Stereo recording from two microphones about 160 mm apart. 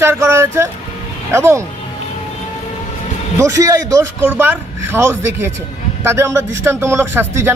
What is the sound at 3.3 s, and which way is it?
Speech, 20° right (ahead or behind).